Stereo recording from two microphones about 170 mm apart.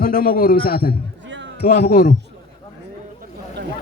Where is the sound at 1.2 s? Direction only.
90° right.